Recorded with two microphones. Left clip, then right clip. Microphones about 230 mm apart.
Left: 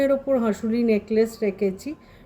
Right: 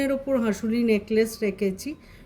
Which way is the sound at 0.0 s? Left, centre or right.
Right.